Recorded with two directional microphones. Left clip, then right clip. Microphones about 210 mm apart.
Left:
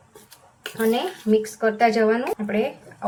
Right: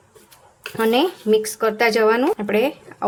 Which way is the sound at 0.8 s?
60° right (ahead or behind).